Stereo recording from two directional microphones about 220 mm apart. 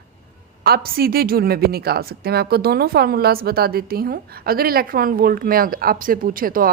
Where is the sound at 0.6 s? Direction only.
45° right (ahead or behind).